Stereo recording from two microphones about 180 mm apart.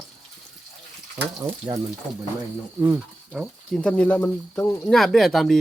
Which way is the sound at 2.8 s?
10° right (ahead or behind).